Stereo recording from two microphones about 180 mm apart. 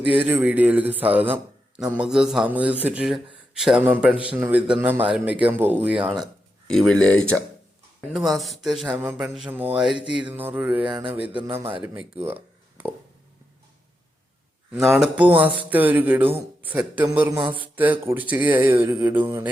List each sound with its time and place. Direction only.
0.0 s speech: 10° right (ahead or behind)
10.8 s mantra: 25° right (ahead or behind)
11.1 s speech: 10° right (ahead or behind)
12.2 s a sound: 10° right (ahead or behind)
14.7 s speech: 15° right (ahead or behind)
17.3 s mantra: 30° right (ahead or behind)
17.7 s speech: 10° right (ahead or behind)